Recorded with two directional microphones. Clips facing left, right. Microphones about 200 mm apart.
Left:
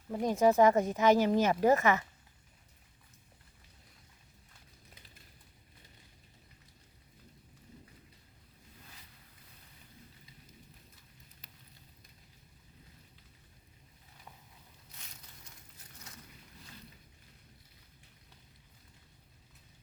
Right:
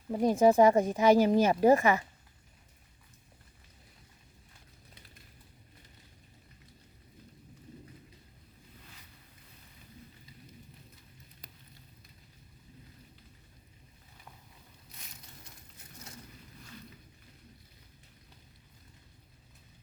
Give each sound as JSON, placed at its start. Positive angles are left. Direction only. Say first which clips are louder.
{"t": 0.1, "sound": "speech", "louder": "right 3 dB", "side_deg": -15}